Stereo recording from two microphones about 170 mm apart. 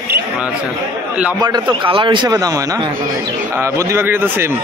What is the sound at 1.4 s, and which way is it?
A man's voice, 25° right (ahead or behind).